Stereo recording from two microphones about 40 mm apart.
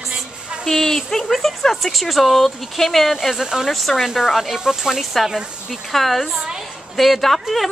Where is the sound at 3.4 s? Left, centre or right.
Centre.